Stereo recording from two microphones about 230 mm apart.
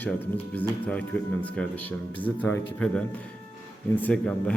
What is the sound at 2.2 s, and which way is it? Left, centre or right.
A man's voice, centre.